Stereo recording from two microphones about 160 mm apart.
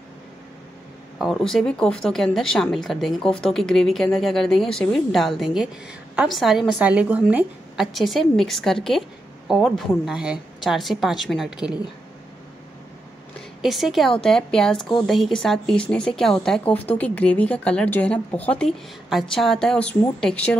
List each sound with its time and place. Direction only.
1.1 s speech: centre (ahead or behind)
13.6 s speech: centre (ahead or behind)